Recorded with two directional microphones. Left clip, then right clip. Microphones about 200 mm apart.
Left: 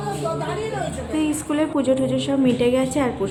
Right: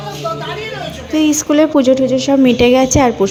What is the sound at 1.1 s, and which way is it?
A woman's voice, 35° right (ahead or behind).